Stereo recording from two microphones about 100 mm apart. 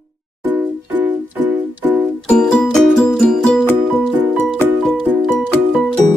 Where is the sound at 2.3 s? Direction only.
10° left (ahead or behind).